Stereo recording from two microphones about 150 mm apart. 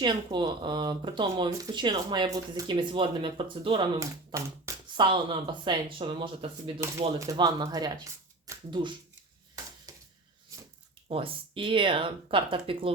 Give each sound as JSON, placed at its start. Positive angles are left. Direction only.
{"t": 0.0, "sound": "speech", "side_deg": -30}
{"t": 4.0, "sound": "speech", "side_deg": -20}
{"t": 4.9, "sound": "speech", "side_deg": -35}
{"t": 9.9, "sound": "a sound", "side_deg": -25}
{"t": 11.1, "sound": "speech", "side_deg": -35}